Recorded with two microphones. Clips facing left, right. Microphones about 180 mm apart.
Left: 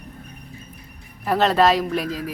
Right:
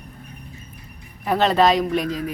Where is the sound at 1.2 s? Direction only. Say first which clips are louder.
Even; centre (ahead or behind).